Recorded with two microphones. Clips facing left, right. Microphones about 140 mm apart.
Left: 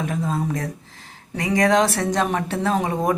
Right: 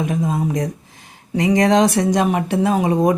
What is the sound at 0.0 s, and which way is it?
Speech, 15° right (ahead or behind).